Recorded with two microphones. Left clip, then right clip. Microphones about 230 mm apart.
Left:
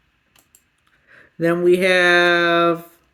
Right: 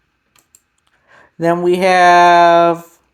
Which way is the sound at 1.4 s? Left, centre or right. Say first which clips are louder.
Right 3 dB; centre.